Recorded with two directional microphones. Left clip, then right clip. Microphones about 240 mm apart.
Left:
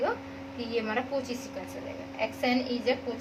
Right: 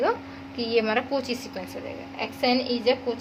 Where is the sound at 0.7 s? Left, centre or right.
Right.